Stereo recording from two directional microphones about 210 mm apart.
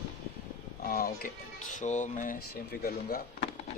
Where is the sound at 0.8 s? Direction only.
45° left (ahead or behind).